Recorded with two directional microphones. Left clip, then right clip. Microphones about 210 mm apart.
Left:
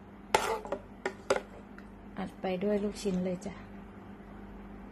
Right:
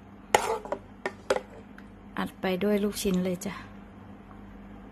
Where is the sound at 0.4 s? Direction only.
20° right (ahead or behind).